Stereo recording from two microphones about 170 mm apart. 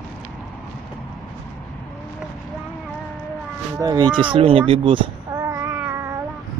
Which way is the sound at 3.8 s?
25° right (ahead or behind).